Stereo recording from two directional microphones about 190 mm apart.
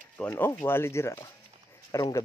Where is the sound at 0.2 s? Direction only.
10° left (ahead or behind).